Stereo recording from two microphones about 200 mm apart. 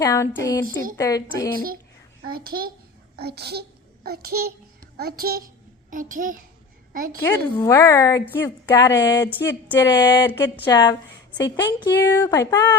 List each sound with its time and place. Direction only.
0.0 s a woman's voice: 15° left (ahead or behind)
2.2 s a child's voice: 50° right (ahead or behind)
7.2 s a woman's voice: 15° left (ahead or behind)